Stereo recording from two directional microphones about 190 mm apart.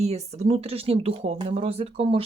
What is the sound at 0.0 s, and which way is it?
Speech, 35° right (ahead or behind).